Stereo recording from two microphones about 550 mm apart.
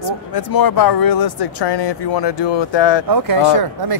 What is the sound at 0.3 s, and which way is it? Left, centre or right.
Speech, left.